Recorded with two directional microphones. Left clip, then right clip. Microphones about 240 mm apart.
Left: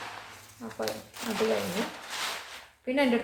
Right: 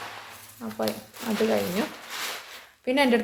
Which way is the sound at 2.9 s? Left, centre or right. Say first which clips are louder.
Right 4 dB; right.